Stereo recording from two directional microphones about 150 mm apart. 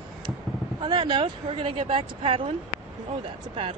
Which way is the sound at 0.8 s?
30° right (ahead or behind).